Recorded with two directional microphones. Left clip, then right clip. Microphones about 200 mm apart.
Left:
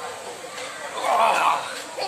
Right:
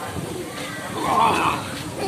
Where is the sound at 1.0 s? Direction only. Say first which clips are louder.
Even; 55° left (ahead or behind).